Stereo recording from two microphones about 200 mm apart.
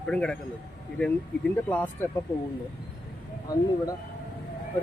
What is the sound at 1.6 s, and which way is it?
Speech, 10° left (ahead or behind).